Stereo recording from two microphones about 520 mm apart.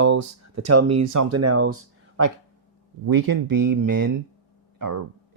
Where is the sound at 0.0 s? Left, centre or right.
Right.